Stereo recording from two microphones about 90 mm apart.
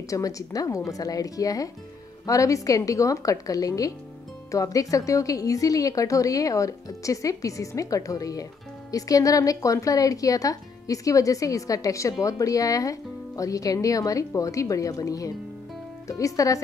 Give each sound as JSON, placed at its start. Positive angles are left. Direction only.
{"t": 0.1, "sound": "speech", "side_deg": 40}